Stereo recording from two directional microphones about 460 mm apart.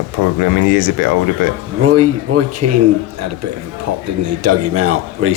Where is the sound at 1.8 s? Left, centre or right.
Right.